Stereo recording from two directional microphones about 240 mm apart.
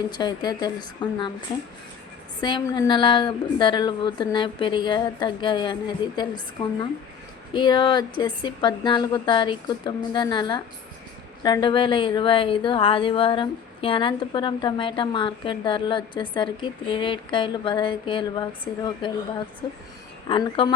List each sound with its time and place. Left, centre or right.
0.1 s a woman's voice: centre
7.5 s a woman's voice: centre
20.2 s a woman's voice: centre